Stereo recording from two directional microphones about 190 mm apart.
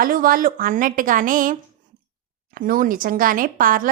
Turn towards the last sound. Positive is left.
turn(degrees=-45)  # may be behind; listen again after turning